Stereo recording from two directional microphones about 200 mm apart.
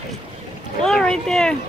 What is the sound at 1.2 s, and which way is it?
Speech, 5° left (ahead or behind).